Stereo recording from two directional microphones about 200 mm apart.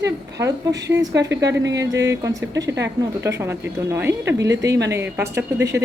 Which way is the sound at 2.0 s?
15° right (ahead or behind).